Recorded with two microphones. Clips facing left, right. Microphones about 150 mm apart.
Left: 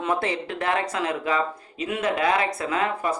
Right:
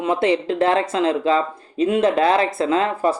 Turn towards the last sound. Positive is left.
turn(degrees=-30)  # may be behind; listen again after turning